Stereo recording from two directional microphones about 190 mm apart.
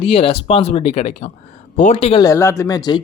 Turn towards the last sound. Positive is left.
turn(degrees=20)  # may be behind; listen again after turning